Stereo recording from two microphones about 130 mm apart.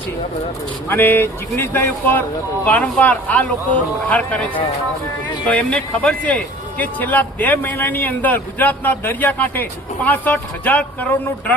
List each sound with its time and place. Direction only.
0.9 s a man's voice: 15° left (ahead or behind)
5.5 s a man's voice: 10° left (ahead or behind)